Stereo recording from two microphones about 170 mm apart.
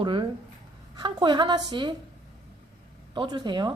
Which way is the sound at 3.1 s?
25° right (ahead or behind).